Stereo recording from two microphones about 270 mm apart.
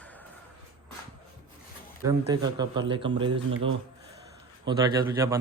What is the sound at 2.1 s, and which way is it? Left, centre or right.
Speech, centre.